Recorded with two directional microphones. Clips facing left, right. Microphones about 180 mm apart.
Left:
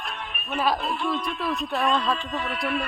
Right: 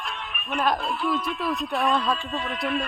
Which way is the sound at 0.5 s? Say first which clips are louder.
Even; 5° left (ahead or behind).